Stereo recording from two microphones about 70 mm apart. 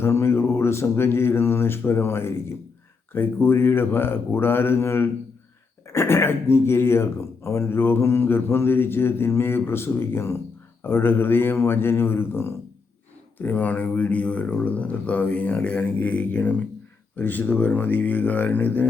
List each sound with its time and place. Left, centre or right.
0.0 s speech: left
13.4 s speech: left